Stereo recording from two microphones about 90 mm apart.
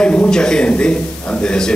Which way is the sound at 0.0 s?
10° left (ahead or behind).